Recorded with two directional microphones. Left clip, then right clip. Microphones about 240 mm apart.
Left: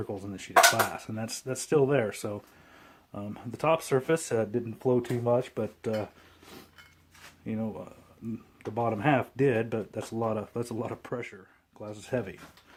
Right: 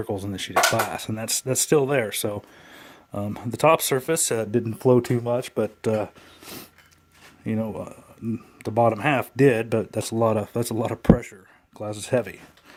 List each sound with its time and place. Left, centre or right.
0.0 s speech: right